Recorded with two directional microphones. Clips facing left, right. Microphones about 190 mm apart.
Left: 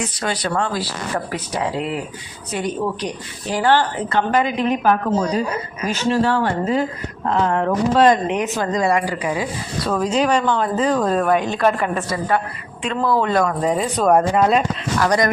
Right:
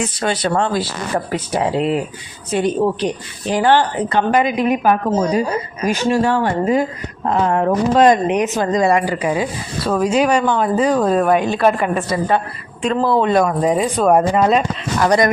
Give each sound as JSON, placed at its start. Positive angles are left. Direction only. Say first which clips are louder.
{"t": 0.2, "sound": "a woman's voice", "louder": "right 4 dB", "side_deg": -25}
{"t": 9.9, "sound": "a woman's voice", "louder": "right 3 dB", "side_deg": -10}
{"t": 12.8, "sound": "a woman's voice", "louder": "right 3 dB", "side_deg": -35}
{"t": 14.9, "sound": "a woman's voice", "louder": "right 3 dB", "side_deg": -25}